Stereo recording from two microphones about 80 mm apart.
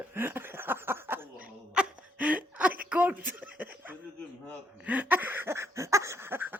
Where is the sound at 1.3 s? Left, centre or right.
Centre.